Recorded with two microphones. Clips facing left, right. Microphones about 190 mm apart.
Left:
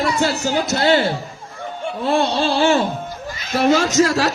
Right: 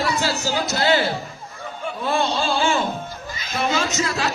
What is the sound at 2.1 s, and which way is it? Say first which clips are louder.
Speech: left 4 dB; 60° left (ahead or behind).